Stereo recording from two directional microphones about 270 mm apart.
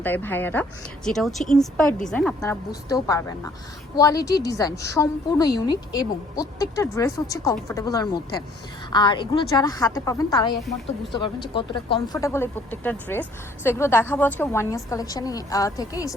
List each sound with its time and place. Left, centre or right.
0.0 s a woman's voice: centre